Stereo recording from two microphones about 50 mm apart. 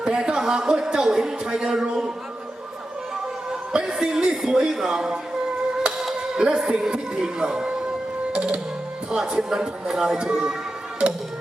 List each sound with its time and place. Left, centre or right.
0.0 s a man's voice: centre
3.5 s speech: centre
8.3 s music: right
9.0 s speech: centre